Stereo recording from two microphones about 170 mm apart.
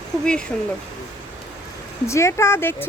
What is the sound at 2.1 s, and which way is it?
Speech, 15° left (ahead or behind).